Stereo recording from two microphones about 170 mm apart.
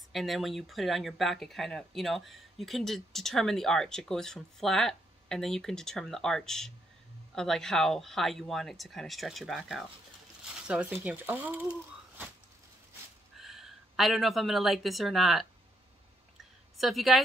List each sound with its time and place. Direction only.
0.1 s speech: centre (ahead or behind)
13.4 s speech: centre (ahead or behind)
16.7 s speech: centre (ahead or behind)